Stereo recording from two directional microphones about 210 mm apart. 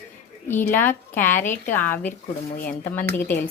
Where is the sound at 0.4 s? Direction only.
10° left (ahead or behind).